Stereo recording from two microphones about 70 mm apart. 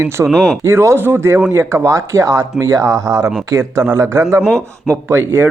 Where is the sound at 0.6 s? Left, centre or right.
Right.